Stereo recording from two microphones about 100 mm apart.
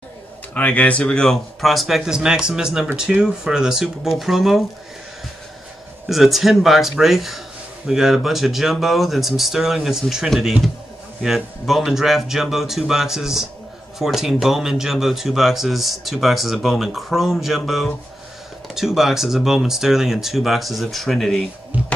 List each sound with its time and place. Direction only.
0.6 s speech: 15° left (ahead or behind); by 4.6 s centre (ahead or behind)
6.0 s speech: centre (ahead or behind)
21.7 s music: 15° right (ahead or behind)